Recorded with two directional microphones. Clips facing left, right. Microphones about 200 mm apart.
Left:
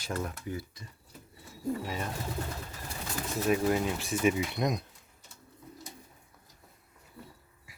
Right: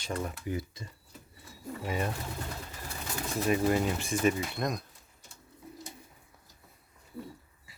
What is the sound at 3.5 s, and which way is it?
Speech, centre (ahead or behind).